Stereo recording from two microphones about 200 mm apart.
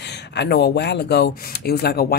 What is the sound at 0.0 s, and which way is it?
Speech, 60° left (ahead or behind).